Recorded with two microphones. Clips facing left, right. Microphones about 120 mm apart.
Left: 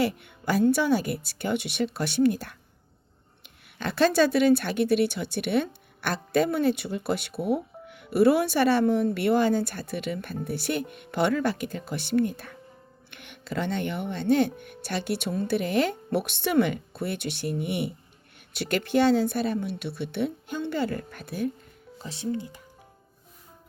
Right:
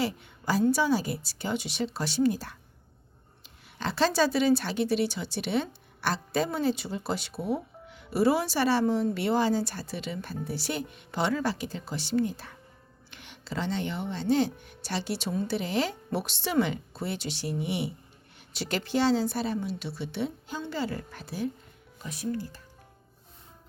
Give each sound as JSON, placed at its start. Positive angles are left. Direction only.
{"t": 0.0, "sound": "a woman's voice", "side_deg": 60}
{"t": 22.0, "sound": "speech", "side_deg": 25}